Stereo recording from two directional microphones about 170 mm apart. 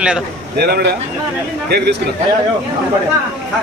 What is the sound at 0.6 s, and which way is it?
Speech, 65° right (ahead or behind).